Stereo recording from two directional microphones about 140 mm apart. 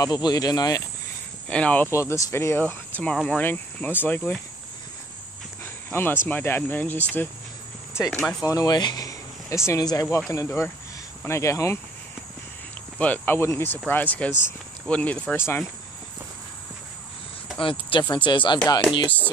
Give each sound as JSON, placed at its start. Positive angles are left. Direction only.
{"t": 0.0, "sound": "speech", "side_deg": 30}
{"t": 1.5, "sound": "speech", "side_deg": 10}
{"t": 1.9, "sound": "speech", "side_deg": 20}
{"t": 5.9, "sound": "speech", "side_deg": 15}
{"t": 8.4, "sound": "speech", "side_deg": 25}
{"t": 13.0, "sound": "speech", "side_deg": 10}
{"t": 17.6, "sound": "speech", "side_deg": 40}
{"t": 19.0, "sound": "speech", "side_deg": 10}